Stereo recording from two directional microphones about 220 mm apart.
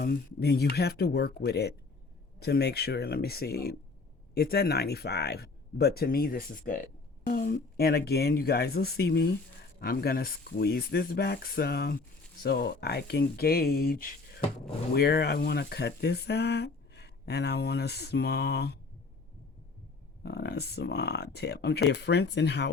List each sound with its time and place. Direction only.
0.0 s speech: 45° left (ahead or behind)
20.2 s speech: 50° left (ahead or behind)